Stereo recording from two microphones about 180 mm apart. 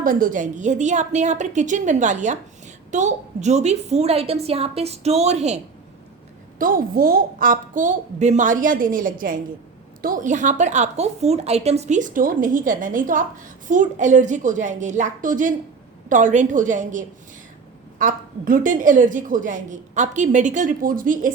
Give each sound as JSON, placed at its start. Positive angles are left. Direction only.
{"t": 0.0, "sound": "a woman's voice", "side_deg": -50}
{"t": 6.6, "sound": "a woman's voice", "side_deg": -50}